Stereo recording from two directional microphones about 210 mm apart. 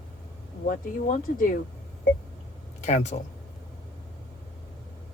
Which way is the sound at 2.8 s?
35° left (ahead or behind).